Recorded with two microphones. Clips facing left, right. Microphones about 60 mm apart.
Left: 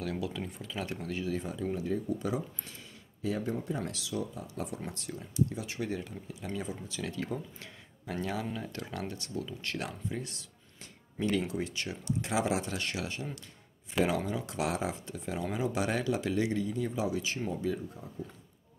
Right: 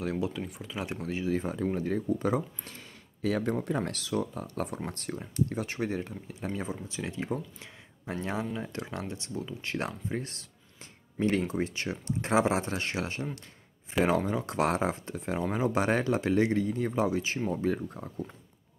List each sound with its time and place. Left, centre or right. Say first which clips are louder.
0.0 s speech: right 4 dB; right
0.3 s speech: right 2 dB; centre
1.0 s speech: right 6 dB; right
1.4 s speech: right 4 dB; right
3.2 s speech: right 4 dB; right
17.5 s speech: right 4 dB; right